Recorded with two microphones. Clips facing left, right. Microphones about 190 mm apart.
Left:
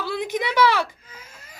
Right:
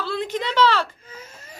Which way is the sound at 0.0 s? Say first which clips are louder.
Even; 10° left (ahead or behind).